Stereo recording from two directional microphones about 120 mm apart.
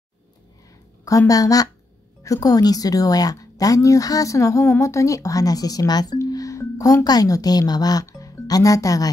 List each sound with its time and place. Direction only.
1.0 s speech: 25° left (ahead or behind)